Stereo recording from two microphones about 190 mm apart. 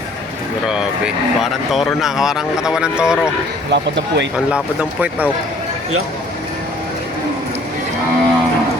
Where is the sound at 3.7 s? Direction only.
70° right (ahead or behind).